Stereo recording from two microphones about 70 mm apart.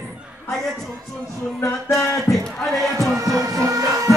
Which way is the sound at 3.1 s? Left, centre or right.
Right.